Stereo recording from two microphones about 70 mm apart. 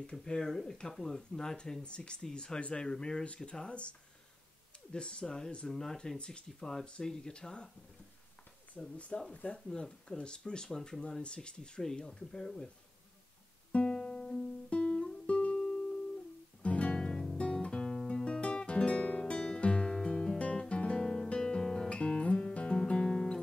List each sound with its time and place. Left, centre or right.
0.0 s speech: centre
4.9 s speech: centre
8.7 s speech: centre
13.7 s music: centre
16.6 s guitar: centre